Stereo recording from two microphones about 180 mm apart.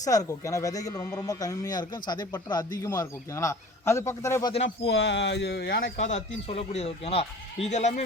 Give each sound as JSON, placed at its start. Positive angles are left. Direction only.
{"t": 0.0, "sound": "a man's voice", "side_deg": 20}
{"t": 4.9, "sound": "speech", "side_deg": 90}